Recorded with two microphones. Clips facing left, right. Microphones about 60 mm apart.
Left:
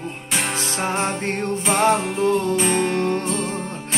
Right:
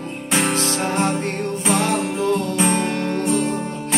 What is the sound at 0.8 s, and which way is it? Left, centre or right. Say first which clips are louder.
Music: left 1 dB; left.